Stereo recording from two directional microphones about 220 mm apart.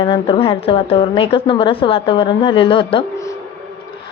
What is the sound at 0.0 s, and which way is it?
A woman's voice, 20° left (ahead or behind).